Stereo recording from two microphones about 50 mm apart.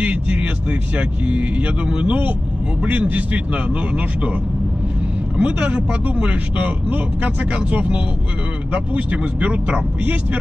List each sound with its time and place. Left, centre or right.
0.0 s speech: right
5.4 s speech: right